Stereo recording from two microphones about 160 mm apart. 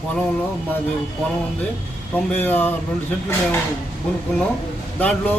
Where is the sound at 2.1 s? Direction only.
10° left (ahead or behind).